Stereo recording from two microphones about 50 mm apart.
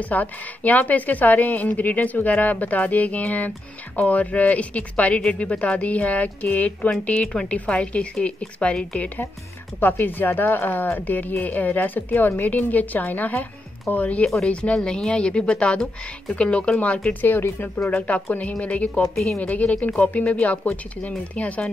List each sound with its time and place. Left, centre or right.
0.1 s a woman's voice: left
9.8 s a woman's voice: left
17.2 s speech: left
17.9 s speech: left